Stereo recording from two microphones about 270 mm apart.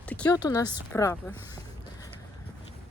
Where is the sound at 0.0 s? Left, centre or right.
Centre.